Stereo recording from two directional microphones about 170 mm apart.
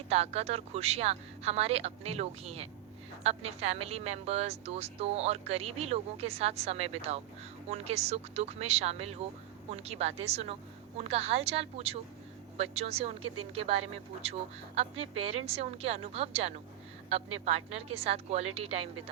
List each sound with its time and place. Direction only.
0.1 s a woman's voice: 40° right (ahead or behind)